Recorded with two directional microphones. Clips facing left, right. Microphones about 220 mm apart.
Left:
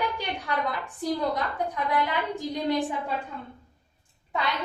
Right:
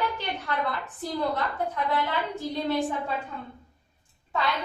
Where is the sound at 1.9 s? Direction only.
15° left (ahead or behind).